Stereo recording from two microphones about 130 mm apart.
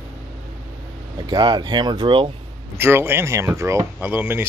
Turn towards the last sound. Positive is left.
turn(degrees=-15)  # may be behind; listen again after turning